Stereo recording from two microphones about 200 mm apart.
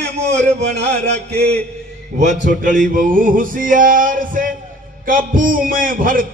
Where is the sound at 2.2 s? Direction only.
35° right (ahead or behind).